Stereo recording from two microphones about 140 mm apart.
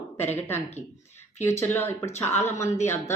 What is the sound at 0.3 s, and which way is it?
Speech, 15° left (ahead or behind).